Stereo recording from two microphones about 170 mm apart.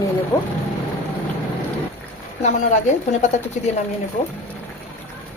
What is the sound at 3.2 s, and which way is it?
Speech, 45° left (ahead or behind).